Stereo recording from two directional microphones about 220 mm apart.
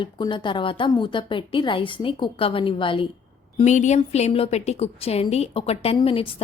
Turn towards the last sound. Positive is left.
turn(degrees=25)  # may be behind; listen again after turning